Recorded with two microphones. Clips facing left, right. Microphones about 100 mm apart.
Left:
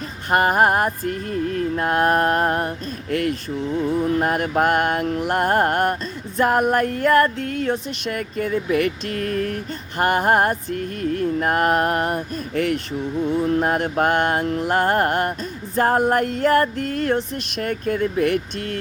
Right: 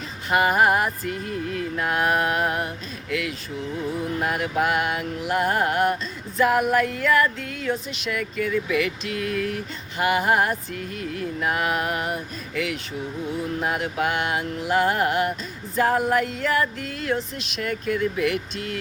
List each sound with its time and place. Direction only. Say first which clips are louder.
0.3 s mantra: left 2 dB; 45° left (ahead or behind)